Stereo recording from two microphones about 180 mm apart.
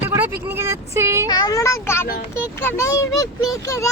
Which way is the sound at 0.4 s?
15° right (ahead or behind).